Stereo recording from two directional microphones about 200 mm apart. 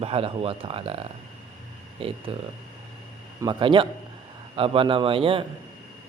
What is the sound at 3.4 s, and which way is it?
Speech, 25° right (ahead or behind).